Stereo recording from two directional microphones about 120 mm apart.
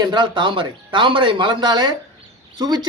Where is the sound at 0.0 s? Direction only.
40° right (ahead or behind).